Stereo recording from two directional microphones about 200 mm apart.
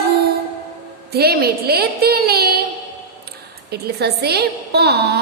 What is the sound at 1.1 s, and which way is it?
A woman's voice, 50° right (ahead or behind).